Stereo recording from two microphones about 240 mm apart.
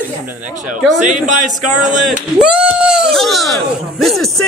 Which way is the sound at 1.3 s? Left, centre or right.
Right.